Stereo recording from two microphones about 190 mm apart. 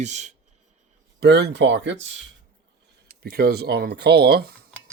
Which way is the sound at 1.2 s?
60° right (ahead or behind).